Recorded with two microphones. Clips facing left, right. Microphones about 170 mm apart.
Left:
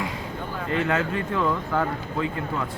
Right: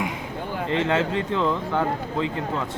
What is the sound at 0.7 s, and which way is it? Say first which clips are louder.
A man's voice: right 2 dB; 25° right (ahead or behind).